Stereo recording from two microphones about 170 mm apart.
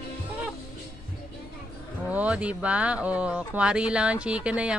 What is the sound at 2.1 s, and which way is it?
Speech, 10° right (ahead or behind).